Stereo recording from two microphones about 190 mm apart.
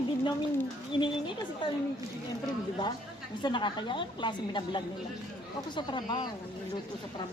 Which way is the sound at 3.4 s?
25° left (ahead or behind).